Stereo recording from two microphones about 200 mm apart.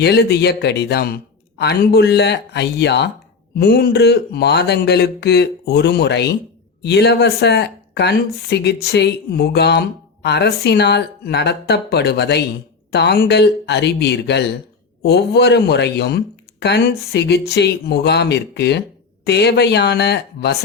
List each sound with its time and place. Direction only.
0.0 s speech: 55° left (ahead or behind)